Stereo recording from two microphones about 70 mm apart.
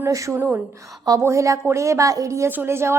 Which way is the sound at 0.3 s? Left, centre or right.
Right.